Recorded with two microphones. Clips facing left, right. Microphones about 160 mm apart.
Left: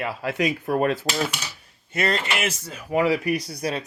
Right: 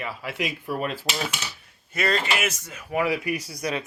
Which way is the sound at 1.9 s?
25° left (ahead or behind).